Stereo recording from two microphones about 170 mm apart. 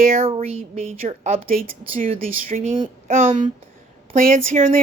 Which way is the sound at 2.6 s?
30° right (ahead or behind).